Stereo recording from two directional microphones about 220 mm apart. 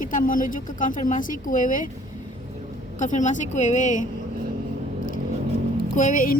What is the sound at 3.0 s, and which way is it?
Speech, 35° left (ahead or behind).